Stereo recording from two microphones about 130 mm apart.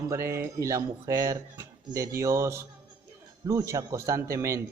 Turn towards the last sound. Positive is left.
turn(degrees=-25)  # may be behind; listen again after turning